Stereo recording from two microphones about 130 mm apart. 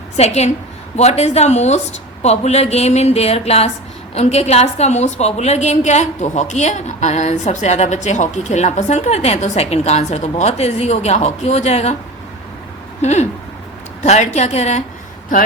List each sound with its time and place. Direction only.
0.2 s a woman's voice: 60° left (ahead or behind)
13.0 s a sound: 60° left (ahead or behind)
14.0 s a woman's voice: 60° left (ahead or behind)